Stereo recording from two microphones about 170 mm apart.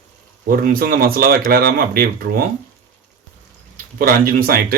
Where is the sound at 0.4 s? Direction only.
60° right (ahead or behind).